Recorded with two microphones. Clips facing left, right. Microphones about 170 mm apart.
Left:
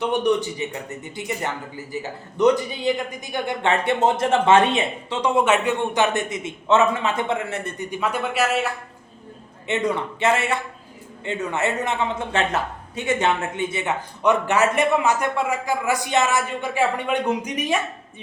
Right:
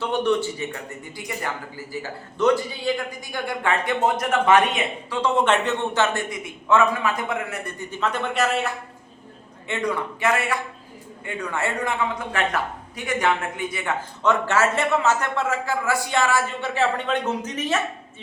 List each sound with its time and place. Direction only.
0.0 s a woman's voice: 15° left (ahead or behind)
5.3 s a woman's voice: 10° left (ahead or behind)
9.6 s a woman's voice: 20° left (ahead or behind)